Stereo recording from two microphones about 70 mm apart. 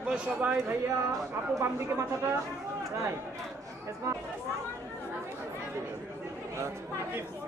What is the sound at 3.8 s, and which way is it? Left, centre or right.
Speech, right.